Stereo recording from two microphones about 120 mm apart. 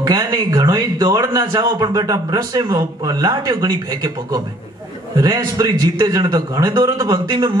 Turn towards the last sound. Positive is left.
turn(degrees=-35)  # may be behind; listen again after turning